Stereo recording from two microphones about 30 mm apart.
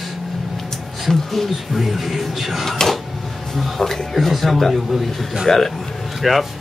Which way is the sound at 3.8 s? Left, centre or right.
Centre.